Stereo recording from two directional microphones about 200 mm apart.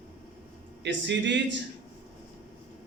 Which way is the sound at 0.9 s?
65° right (ahead or behind).